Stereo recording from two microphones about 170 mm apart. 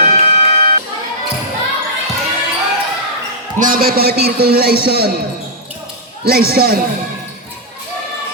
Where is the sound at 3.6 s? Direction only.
55° right (ahead or behind).